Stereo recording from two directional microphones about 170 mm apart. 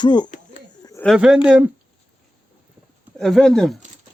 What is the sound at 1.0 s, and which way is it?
Speech, 5° right (ahead or behind).